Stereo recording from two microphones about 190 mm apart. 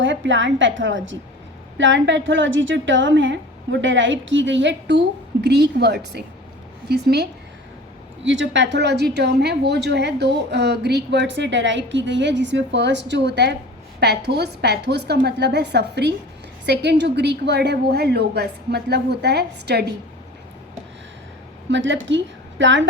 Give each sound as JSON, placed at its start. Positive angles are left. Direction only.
{"t": 0.0, "sound": "a woman's voice", "side_deg": -75}
{"t": 8.2, "sound": "a woman's voice", "side_deg": -75}
{"t": 21.7, "sound": "a woman's voice", "side_deg": -75}